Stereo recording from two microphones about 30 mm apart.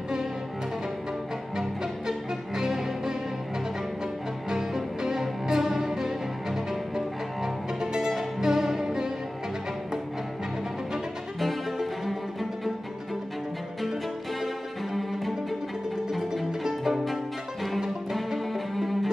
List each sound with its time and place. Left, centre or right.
1.6 s music: centre
4.5 s music: centre
11.3 s music: centre
16.1 s music: centre
18.5 s music: centre